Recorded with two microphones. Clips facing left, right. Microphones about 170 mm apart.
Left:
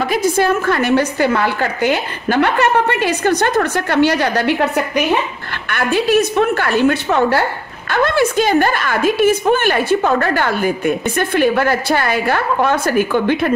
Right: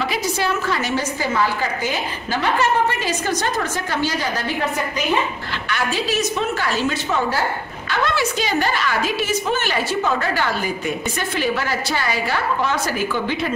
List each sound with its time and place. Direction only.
0.0 s a woman's voice: 50° left (ahead or behind)
7.9 s a woman's voice: 50° left (ahead or behind)